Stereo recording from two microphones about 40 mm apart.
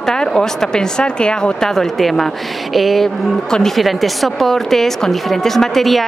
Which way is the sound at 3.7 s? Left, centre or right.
Centre.